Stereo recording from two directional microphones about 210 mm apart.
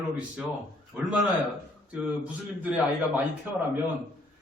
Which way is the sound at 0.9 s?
5° right (ahead or behind).